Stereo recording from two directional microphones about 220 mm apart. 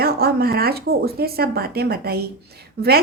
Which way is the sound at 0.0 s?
45° right (ahead or behind).